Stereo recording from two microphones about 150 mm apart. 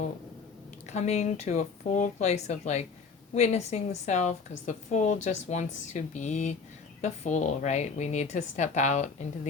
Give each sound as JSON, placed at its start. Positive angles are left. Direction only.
{"t": 0.9, "sound": "a woman's voice", "side_deg": 45}